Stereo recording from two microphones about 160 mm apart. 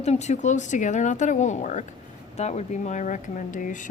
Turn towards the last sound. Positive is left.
turn(degrees=55)  # may be behind; listen again after turning